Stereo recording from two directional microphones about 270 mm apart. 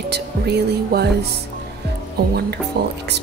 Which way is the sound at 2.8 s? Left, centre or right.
Right.